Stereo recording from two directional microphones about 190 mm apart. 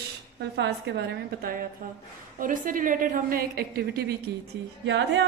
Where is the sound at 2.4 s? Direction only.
45° right (ahead or behind); by 5.2 s 65° right (ahead or behind).